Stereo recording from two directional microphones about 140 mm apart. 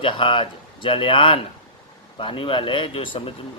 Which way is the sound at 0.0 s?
35° left (ahead or behind).